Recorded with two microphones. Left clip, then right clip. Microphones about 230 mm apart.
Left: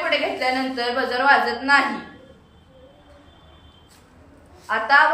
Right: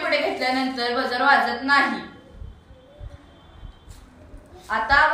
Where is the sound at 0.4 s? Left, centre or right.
Centre.